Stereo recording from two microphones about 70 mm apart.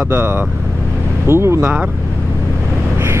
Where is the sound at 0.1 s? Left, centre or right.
Right.